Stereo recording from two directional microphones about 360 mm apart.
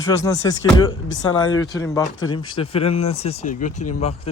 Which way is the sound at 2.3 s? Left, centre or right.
Centre.